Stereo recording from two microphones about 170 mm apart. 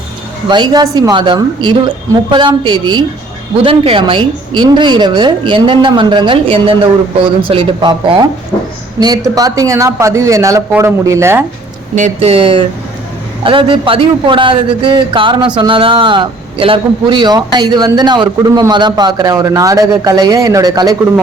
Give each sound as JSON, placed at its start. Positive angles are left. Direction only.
{"t": 0.4, "sound": "a man's voice", "side_deg": -25}
{"t": 11.9, "sound": "a man's voice", "side_deg": -40}